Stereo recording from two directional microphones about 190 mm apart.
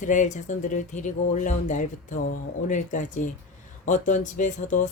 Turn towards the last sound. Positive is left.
turn(degrees=40)  # may be behind; listen again after turning